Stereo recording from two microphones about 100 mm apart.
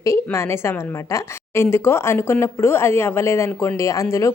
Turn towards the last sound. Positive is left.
turn(degrees=30)  # may be behind; listen again after turning